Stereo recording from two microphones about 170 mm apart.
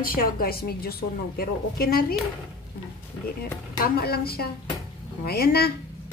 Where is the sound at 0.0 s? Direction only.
60° left (ahead or behind).